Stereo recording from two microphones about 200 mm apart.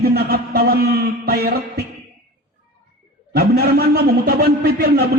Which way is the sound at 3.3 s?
50° right (ahead or behind).